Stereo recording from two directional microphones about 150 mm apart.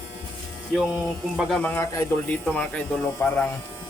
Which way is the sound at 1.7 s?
15° left (ahead or behind).